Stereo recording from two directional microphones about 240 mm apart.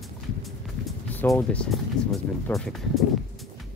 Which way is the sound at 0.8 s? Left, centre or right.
Centre.